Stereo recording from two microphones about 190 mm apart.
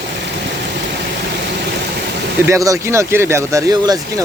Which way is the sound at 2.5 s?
15° right (ahead or behind).